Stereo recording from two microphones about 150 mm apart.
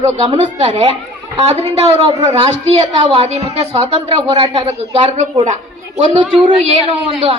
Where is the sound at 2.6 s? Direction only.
45° right (ahead or behind).